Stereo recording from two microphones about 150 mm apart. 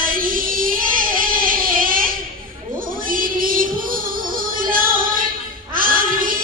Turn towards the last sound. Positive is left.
turn(degrees=-70)  # may be behind; listen again after turning